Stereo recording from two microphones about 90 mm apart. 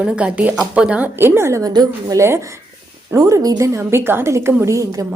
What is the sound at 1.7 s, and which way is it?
Speech, 50° right (ahead or behind).